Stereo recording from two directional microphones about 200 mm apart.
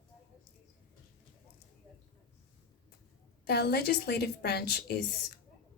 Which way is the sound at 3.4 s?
55° left (ahead or behind).